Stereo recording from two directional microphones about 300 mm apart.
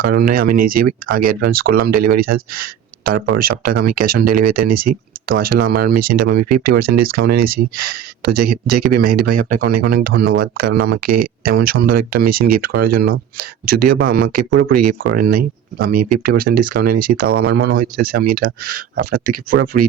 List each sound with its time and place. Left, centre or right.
0.0 s speech: right